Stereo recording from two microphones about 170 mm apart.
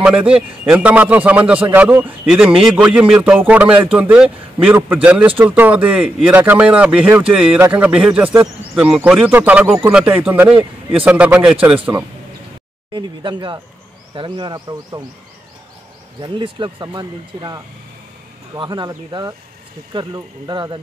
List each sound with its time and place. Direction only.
0.0 s a man's voice: 5° right (ahead or behind)
11.9 s speech: 20° right (ahead or behind)
16.2 s speech: 30° right (ahead or behind)